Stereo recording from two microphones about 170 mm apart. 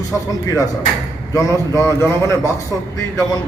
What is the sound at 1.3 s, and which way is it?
A man's voice, 15° left (ahead or behind).